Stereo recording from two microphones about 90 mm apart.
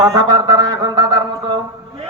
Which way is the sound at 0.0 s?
45° right (ahead or behind).